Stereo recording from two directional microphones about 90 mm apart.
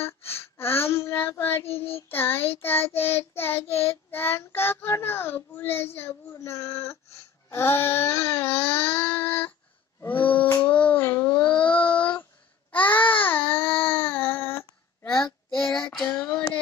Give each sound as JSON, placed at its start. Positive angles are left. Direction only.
{"t": 0.0, "sound": "child singing", "side_deg": 25}
{"t": 5.9, "sound": "a child's voice", "side_deg": 30}
{"t": 7.4, "sound": "a sound", "side_deg": 30}
{"t": 10.0, "sound": "child singing", "side_deg": 20}
{"t": 11.1, "sound": "babbling", "side_deg": 25}
{"t": 11.3, "sound": "a sound", "side_deg": 15}
{"t": 11.8, "sound": "child singing", "side_deg": 65}
{"t": 12.7, "sound": "babbling", "side_deg": 20}
{"t": 13.7, "sound": "child singing", "side_deg": 20}
{"t": 15.7, "sound": "child singing", "side_deg": 5}
{"t": 16.1, "sound": "child singing", "side_deg": 25}